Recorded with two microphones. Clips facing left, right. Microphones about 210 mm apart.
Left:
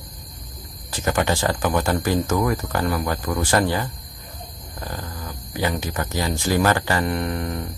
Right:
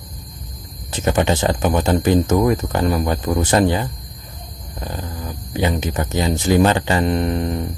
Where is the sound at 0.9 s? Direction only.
20° right (ahead or behind).